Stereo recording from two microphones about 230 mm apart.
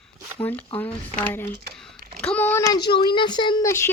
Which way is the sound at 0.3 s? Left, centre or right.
Centre.